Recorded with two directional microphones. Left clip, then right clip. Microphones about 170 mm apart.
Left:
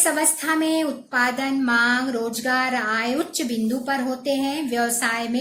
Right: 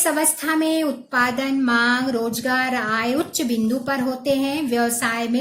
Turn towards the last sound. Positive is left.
turn(degrees=-55)  # may be behind; listen again after turning